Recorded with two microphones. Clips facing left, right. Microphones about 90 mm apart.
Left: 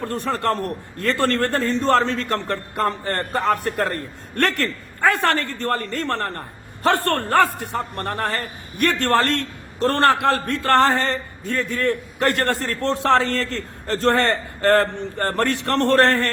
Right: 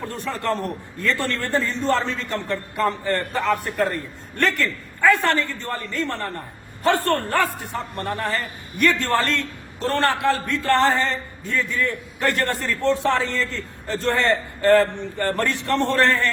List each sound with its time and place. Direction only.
0.3 s a man's voice: 55° left (ahead or behind)
12.9 s a man's voice: 70° left (ahead or behind)
15.2 s speech: 45° left (ahead or behind)
15.4 s a man's voice: 60° left (ahead or behind)